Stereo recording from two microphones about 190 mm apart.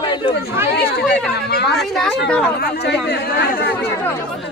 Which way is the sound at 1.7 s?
Centre (ahead or behind).